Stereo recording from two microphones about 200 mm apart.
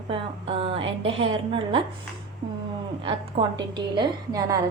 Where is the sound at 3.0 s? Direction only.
25° right (ahead or behind).